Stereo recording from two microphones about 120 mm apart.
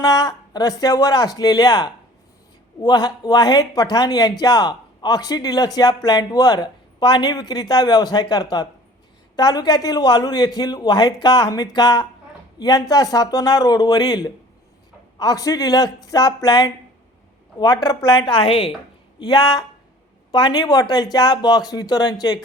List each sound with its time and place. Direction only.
0.0 s speech: 35° left (ahead or behind); by 18.7 s 50° left (ahead or behind)
19.2 s speech: 35° left (ahead or behind)